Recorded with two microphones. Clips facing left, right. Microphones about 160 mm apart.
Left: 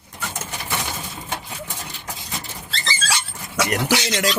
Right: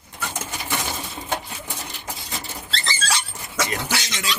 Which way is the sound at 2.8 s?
10° left (ahead or behind).